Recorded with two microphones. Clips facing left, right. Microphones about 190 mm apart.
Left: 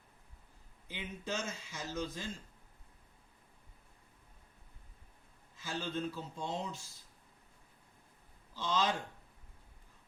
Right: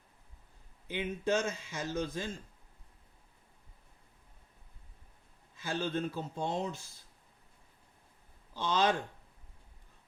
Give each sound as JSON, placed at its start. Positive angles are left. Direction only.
{"t": 0.9, "sound": "a man's voice", "side_deg": -60}
{"t": 5.5, "sound": "a man's voice", "side_deg": -60}
{"t": 8.5, "sound": "a man's voice", "side_deg": -60}